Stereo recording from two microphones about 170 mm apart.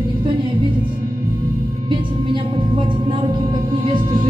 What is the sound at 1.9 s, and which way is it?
Speech, 30° right (ahead or behind).